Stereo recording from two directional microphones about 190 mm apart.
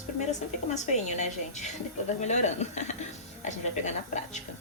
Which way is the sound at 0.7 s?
40° left (ahead or behind).